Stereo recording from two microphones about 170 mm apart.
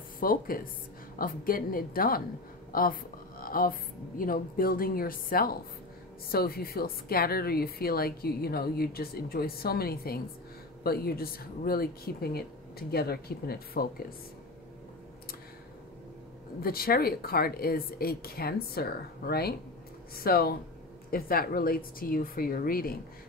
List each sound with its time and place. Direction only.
0.2 s a woman's voice: 55° left (ahead or behind)
2.7 s music: 55° left (ahead or behind)
4.2 s a woman's voice: 55° left (ahead or behind)
16.6 s a woman's voice: 60° left (ahead or behind)